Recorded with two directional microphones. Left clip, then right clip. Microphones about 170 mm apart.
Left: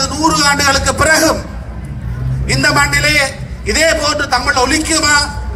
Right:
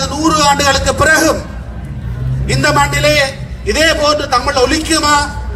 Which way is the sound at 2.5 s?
20° left (ahead or behind).